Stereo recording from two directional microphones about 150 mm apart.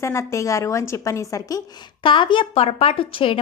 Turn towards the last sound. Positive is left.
turn(degrees=35)  # may be behind; listen again after turning